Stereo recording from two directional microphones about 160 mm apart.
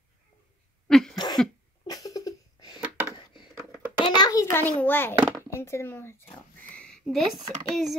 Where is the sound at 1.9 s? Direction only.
20° left (ahead or behind).